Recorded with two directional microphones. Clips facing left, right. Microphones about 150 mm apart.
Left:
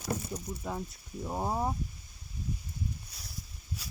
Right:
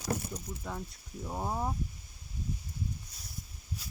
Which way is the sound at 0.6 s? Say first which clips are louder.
Left 3 dB; 10° left (ahead or behind).